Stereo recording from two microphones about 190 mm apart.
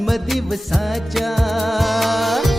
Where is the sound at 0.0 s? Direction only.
Centre (ahead or behind).